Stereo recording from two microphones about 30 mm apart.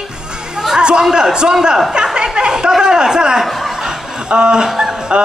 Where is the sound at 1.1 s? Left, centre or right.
Right.